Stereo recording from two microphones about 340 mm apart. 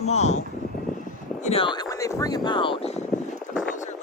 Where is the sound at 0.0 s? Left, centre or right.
Centre.